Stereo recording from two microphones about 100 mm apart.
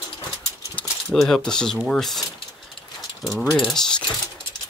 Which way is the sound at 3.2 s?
5° left (ahead or behind).